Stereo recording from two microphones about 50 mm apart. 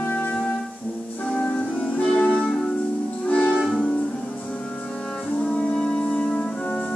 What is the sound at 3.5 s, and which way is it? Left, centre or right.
Music, centre.